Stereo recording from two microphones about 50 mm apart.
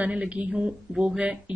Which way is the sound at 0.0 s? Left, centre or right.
Right.